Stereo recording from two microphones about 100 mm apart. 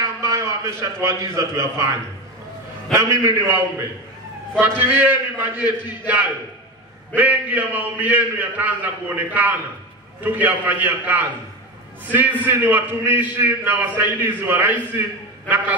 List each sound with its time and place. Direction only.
0.2 s a man's voice: 35° right (ahead or behind)
4.6 s a man's voice: 20° right (ahead or behind)